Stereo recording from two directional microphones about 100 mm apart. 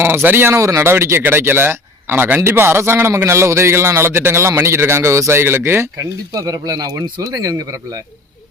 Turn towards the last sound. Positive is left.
turn(degrees=-35)  # may be behind; listen again after turning